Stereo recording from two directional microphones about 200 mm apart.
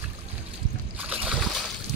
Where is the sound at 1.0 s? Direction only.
5° right (ahead or behind).